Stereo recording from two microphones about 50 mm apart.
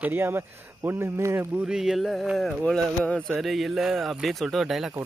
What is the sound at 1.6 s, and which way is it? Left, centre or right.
Speech, centre.